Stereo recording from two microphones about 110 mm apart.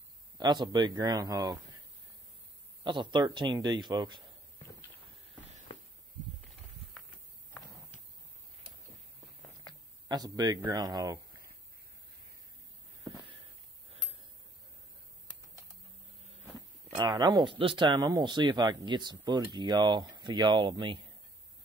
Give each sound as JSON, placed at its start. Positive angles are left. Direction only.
{"t": 0.4, "sound": "speech", "side_deg": -40}
{"t": 2.8, "sound": "speech", "side_deg": -45}
{"t": 5.7, "sound": "a sound", "side_deg": 50}
{"t": 10.0, "sound": "speech", "side_deg": -35}
{"t": 16.9, "sound": "speech", "side_deg": -45}